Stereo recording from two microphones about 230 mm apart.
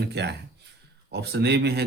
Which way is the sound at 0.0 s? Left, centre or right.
Right.